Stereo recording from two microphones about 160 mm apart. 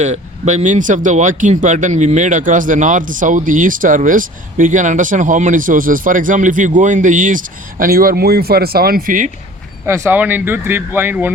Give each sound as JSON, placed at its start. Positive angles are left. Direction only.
{"t": 0.0, "sound": "speech", "side_deg": -45}
{"t": 9.8, "sound": "speech", "side_deg": -15}